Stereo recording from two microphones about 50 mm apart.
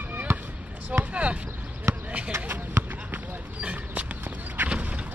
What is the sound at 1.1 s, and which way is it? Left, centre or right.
Speech, right.